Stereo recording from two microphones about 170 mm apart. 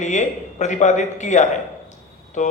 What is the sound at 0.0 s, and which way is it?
Speech, 45° left (ahead or behind).